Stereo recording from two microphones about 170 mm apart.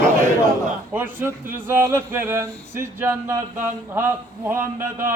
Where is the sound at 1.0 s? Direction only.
15° right (ahead or behind).